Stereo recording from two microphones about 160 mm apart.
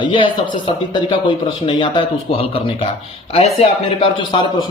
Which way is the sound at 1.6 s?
30° left (ahead or behind).